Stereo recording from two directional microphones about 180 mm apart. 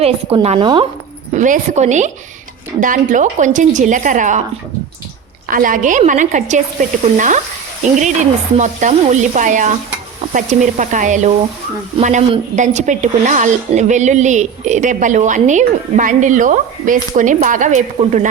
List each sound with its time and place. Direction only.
0.4 s a woman's voice: 30° right (ahead or behind)
1.3 s a woman's voice: 45° right (ahead or behind)
5.5 s a woman's voice: 50° right (ahead or behind)